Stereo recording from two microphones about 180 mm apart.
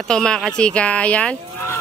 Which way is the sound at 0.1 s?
5° left (ahead or behind).